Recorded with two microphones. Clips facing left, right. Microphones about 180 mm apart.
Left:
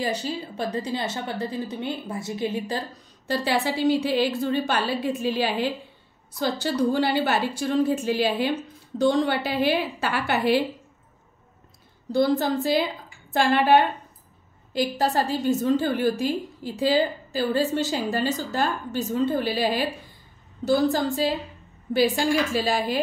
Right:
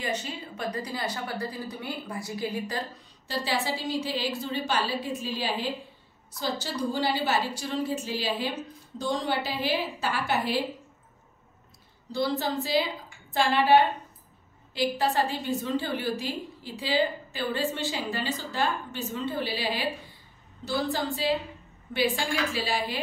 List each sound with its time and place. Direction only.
0.0 s a woman's voice: 35° left (ahead or behind)
3.3 s a woman's voice: 60° left (ahead or behind)
12.1 s a woman's voice: 50° left (ahead or behind)